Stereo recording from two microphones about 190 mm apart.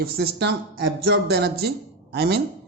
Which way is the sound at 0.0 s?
60° right (ahead or behind).